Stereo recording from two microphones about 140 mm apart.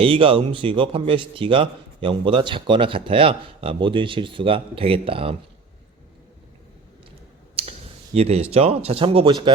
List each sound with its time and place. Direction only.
0.0 s a man's voice: 40° right (ahead or behind)
7.6 s clicking: 40° right (ahead or behind)
8.1 s speech: 45° right (ahead or behind)